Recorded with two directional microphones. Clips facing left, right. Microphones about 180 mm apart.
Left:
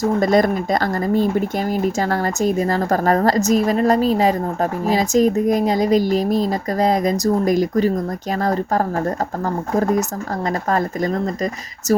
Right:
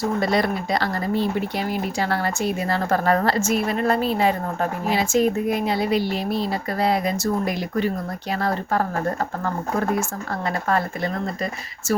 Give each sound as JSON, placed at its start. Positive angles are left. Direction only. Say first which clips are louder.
{"t": 0.0, "sound": "speech", "louder": "left 6 dB", "side_deg": 45}